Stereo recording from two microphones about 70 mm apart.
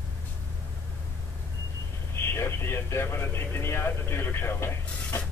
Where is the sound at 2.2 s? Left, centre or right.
Left.